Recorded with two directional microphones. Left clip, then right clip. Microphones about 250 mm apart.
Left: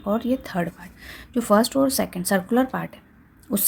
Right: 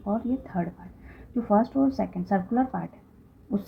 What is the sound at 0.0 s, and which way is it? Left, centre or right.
Speech, left.